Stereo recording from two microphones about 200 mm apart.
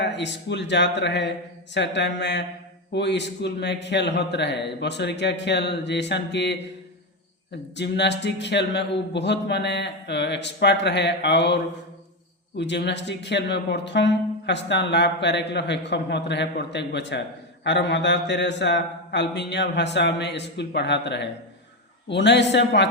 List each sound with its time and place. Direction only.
0.0 s speech: 60° left (ahead or behind)
7.8 s speech: 60° left (ahead or behind)